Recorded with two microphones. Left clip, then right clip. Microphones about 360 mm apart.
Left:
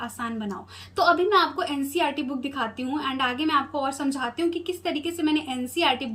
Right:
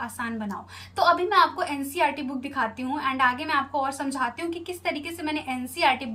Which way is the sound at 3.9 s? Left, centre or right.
Right.